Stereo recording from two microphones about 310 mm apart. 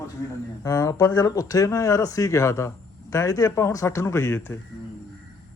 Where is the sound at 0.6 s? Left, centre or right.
Centre.